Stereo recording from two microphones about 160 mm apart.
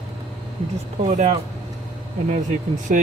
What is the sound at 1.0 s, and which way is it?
Speech, 50° right (ahead or behind).